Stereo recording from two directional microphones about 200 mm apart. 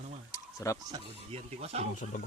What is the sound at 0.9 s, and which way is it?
Speech, 30° right (ahead or behind).